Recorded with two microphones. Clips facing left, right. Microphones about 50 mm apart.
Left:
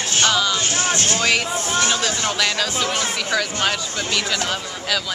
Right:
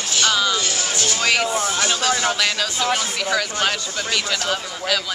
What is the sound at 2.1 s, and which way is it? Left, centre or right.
Speech, centre.